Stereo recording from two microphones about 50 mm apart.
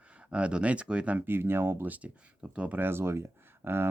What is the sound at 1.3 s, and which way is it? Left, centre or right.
Speech, right.